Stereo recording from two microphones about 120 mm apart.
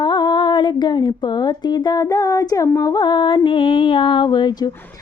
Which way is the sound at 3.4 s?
45° left (ahead or behind).